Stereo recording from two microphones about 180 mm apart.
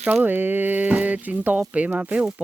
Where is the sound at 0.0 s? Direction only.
10° right (ahead or behind).